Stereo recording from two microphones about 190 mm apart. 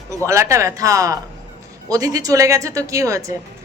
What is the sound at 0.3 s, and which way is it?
Speech, 15° right (ahead or behind).